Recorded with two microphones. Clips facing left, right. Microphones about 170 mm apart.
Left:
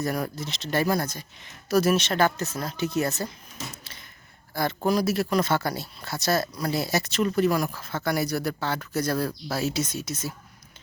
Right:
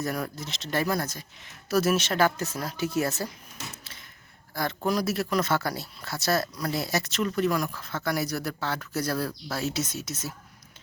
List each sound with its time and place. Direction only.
0.0 s speech: centre (ahead or behind)
4.5 s speech: centre (ahead or behind)